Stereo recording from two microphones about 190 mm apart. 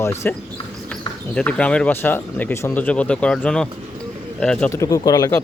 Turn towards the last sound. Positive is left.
turn(degrees=20)  # may be behind; listen again after turning